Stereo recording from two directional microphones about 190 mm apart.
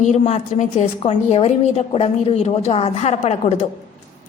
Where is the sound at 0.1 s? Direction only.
35° left (ahead or behind).